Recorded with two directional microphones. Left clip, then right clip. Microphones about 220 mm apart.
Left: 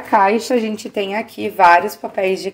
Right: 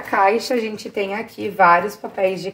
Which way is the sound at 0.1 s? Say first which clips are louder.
Left 3 dB; 25° left (ahead or behind).